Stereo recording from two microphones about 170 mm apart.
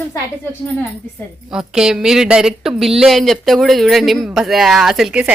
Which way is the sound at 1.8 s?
5° right (ahead or behind).